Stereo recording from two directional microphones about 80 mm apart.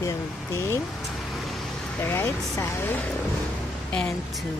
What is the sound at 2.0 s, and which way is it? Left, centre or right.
Speech, left.